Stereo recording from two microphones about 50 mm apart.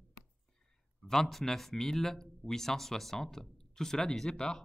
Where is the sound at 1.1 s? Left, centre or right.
Centre.